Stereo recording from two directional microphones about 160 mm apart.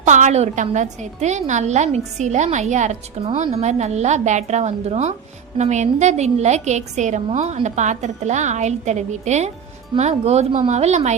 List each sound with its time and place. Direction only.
0.0 s a woman's voice: 50° right (ahead or behind)